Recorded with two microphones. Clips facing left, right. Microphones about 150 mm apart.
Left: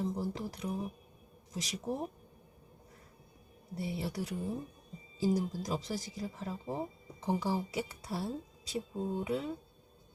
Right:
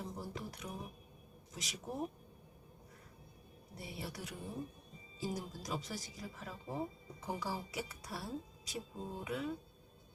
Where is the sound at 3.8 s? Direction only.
30° left (ahead or behind).